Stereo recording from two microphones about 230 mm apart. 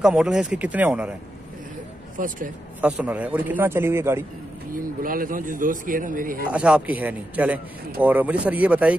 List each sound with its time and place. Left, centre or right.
0.0 s speech: centre
2.1 s speech: right
2.8 s speech: centre
4.7 s speech: right
6.5 s speech: centre